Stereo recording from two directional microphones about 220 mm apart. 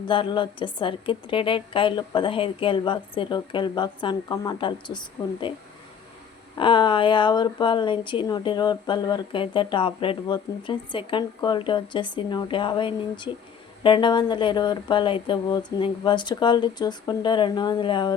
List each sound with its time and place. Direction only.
0.1 s speech: 20° left (ahead or behind)
6.6 s speech: 20° left (ahead or behind)